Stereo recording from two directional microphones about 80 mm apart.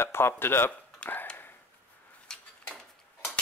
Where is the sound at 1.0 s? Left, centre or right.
Left.